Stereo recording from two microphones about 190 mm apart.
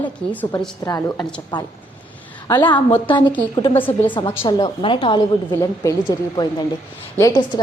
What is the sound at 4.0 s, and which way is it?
A woman's voice, 25° left (ahead or behind).